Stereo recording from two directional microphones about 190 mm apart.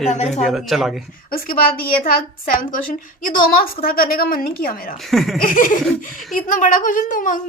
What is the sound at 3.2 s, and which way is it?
Speech, 45° left (ahead or behind).